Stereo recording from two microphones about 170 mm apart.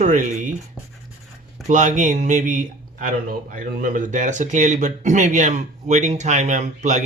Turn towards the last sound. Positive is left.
turn(degrees=-45)  # may be behind; listen again after turning